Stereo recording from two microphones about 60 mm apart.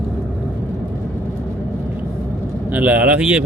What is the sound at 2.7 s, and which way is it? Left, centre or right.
Speech, right.